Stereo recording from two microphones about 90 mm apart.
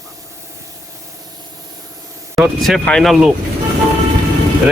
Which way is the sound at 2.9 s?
5° left (ahead or behind).